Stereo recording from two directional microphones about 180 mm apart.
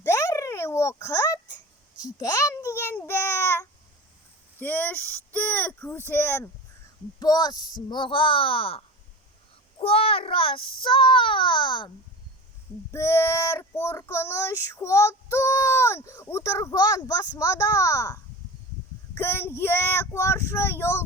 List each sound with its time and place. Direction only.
0.0 s a sound: 15° left (ahead or behind)
2.1 s a child's voice: 20° left (ahead or behind)
4.6 s child singing: 10° left (ahead or behind)
7.2 s a child's voice: 20° left (ahead or behind)
12.9 s child singing: 15° left (ahead or behind)